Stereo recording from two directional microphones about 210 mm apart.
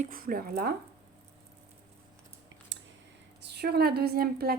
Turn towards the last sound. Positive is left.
turn(degrees=-45)  # may be behind; listen again after turning